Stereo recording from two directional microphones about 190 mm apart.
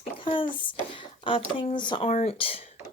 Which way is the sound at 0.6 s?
25° left (ahead or behind).